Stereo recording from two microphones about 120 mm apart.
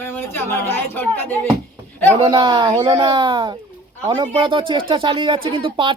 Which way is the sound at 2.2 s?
45° right (ahead or behind).